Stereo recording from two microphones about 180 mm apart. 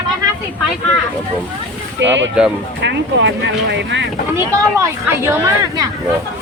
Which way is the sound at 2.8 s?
75° right (ahead or behind).